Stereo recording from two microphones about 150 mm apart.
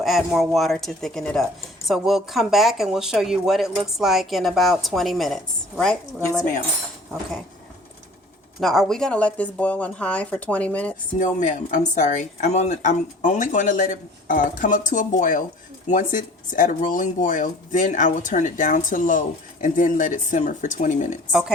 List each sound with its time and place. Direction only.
0.0 s speech: centre (ahead or behind)
8.6 s speech: centre (ahead or behind)
11.2 s speech: 55° left (ahead or behind)